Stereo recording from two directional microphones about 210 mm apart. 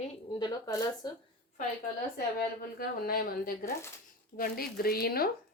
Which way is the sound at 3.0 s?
45° left (ahead or behind).